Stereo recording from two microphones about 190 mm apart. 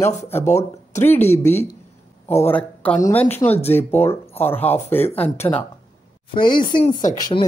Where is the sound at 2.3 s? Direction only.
10° left (ahead or behind).